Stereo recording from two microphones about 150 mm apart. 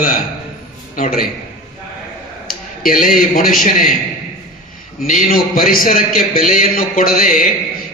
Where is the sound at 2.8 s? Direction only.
70° left (ahead or behind).